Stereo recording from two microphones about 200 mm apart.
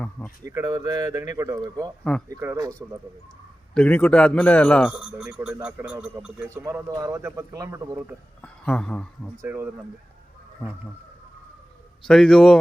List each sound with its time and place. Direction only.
0.4 s a man's voice: 15° right (ahead or behind)
3.8 s a man's voice: 10° left (ahead or behind); by 8.1 s 15° right (ahead or behind)
8.4 s a man's voice: 5° left (ahead or behind)
9.4 s a man's voice: 10° right (ahead or behind)
12.0 s a man's voice: 5° left (ahead or behind)